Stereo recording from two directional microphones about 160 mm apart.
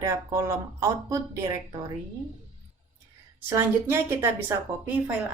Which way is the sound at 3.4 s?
15° right (ahead or behind).